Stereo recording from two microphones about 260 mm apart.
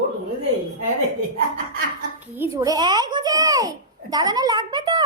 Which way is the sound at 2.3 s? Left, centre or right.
Centre.